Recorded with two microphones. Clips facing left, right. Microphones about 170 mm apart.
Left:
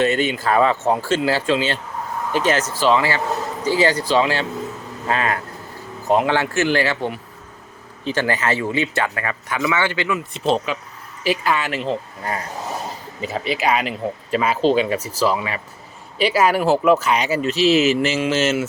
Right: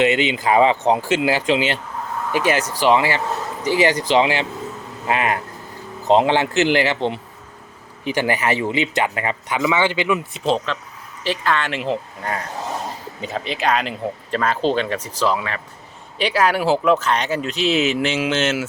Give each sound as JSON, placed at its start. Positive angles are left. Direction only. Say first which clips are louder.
{"t": 0.0, "sound": "speech", "louder": "right 1 dB", "side_deg": -20}
{"t": 10.3, "sound": "speech", "louder": "left 1 dB", "side_deg": 5}
{"t": 13.2, "sound": "speech", "louder": "left 1 dB", "side_deg": 5}